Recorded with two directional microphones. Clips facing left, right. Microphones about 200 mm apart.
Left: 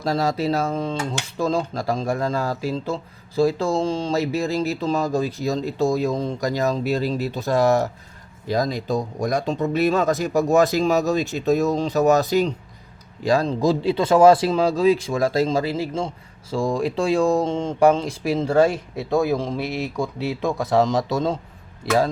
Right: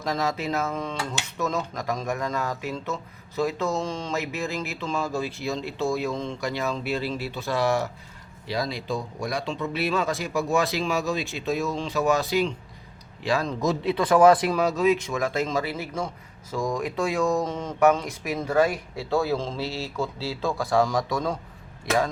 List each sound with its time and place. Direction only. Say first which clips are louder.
0.0 s speech: left 5 dB; 35° left (ahead or behind)